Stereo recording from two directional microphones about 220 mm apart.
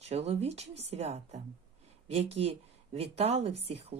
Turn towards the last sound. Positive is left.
turn(degrees=-30)  # may be behind; listen again after turning